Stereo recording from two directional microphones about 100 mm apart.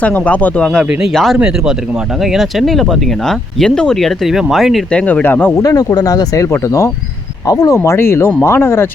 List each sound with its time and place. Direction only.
0.0 s speech: 15° left (ahead or behind); by 4.8 s centre (ahead or behind)
4.9 s speech: 10° left (ahead or behind)
5.5 s speech: 40° left (ahead or behind)
7.8 s speech: 25° left (ahead or behind)